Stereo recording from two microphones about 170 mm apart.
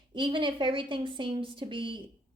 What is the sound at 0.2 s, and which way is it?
Speech, 30° right (ahead or behind).